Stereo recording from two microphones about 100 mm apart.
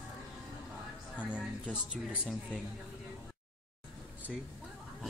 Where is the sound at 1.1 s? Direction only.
15° left (ahead or behind).